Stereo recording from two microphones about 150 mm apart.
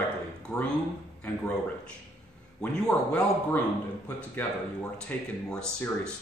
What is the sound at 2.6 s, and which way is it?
A man's voice, 5° left (ahead or behind).